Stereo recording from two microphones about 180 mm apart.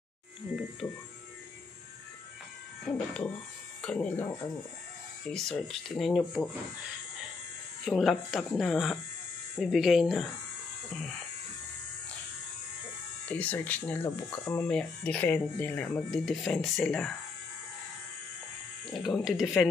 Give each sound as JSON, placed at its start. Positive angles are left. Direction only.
{"t": 2.9, "sound": "speech", "side_deg": 5}
{"t": 5.3, "sound": "speech", "side_deg": 0}
{"t": 7.8, "sound": "speech", "side_deg": 0}
{"t": 13.3, "sound": "speech", "side_deg": 10}
{"t": 18.9, "sound": "speech", "side_deg": 0}